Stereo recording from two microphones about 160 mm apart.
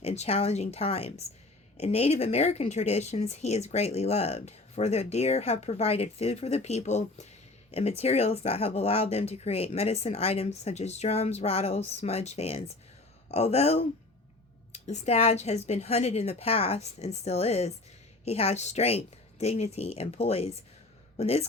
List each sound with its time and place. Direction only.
0.0 s speech: 40° left (ahead or behind)